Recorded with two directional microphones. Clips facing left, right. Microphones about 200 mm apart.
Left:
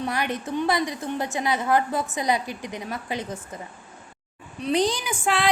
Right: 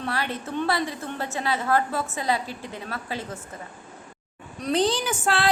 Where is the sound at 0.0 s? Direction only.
15° left (ahead or behind).